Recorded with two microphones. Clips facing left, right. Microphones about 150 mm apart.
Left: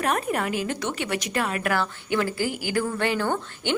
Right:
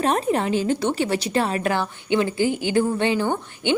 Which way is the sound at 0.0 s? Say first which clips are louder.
Right 4 dB; 30° right (ahead or behind).